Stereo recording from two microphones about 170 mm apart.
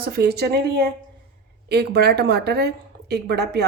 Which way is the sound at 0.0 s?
65° right (ahead or behind).